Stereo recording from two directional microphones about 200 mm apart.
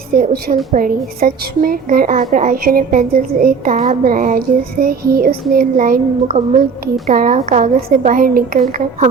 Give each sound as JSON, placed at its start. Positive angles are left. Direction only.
{"t": 0.1, "sound": "speech", "side_deg": -50}